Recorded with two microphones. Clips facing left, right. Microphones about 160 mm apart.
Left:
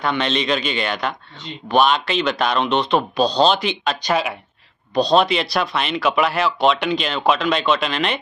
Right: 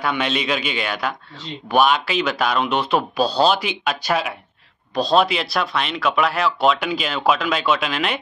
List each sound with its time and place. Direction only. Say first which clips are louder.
0.0 s speech: left 1 dB; 10° right (ahead or behind)